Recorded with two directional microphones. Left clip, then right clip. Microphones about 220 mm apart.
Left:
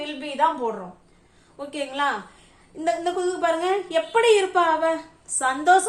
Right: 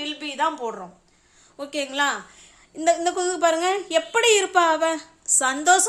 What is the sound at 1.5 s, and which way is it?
A woman's voice, 55° right (ahead or behind).